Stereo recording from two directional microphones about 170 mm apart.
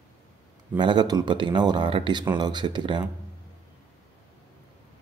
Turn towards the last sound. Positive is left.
turn(degrees=-25)  # may be behind; listen again after turning